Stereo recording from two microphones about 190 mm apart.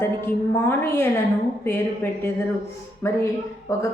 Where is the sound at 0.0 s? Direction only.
10° left (ahead or behind).